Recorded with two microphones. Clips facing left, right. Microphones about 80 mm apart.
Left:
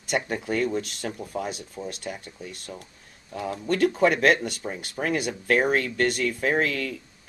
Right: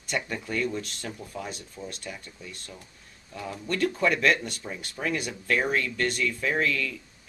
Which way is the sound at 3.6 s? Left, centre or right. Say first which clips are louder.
Left 5 dB; left.